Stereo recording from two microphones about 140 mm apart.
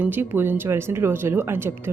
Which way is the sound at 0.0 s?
15° right (ahead or behind).